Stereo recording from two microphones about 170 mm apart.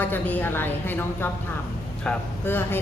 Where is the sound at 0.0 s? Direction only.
10° left (ahead or behind).